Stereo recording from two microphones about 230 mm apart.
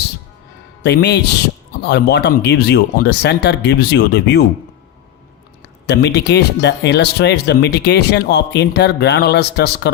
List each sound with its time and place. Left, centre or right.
0.8 s speech: left
5.8 s speech: left